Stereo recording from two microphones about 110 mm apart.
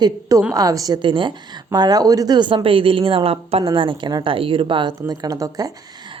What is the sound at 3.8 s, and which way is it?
A woman's voice, 45° right (ahead or behind).